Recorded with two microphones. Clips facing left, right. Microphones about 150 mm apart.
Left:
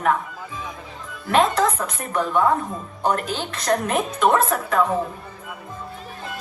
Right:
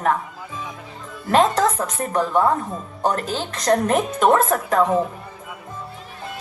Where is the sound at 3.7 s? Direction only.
45° right (ahead or behind).